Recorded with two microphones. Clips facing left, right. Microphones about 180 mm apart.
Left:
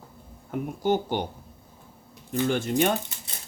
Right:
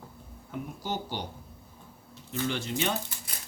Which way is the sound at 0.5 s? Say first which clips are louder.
Left 9 dB; 55° left (ahead or behind).